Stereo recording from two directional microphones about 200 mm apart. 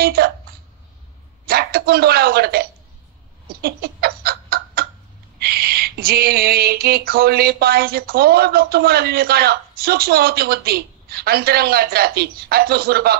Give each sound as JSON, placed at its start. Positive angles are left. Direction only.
{"t": 0.0, "sound": "speech", "side_deg": -50}
{"t": 1.5, "sound": "speech", "side_deg": -50}
{"t": 3.4, "sound": "bird", "side_deg": -50}
{"t": 5.4, "sound": "a sound", "side_deg": -50}